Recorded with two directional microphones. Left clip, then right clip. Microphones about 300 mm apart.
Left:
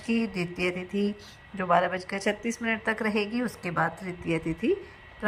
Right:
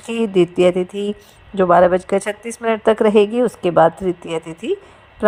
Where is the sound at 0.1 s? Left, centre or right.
Right.